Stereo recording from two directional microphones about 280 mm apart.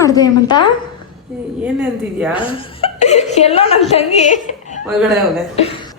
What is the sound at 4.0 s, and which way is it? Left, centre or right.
Speech, left.